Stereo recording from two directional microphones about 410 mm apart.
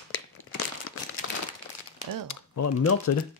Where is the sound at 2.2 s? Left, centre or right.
Left.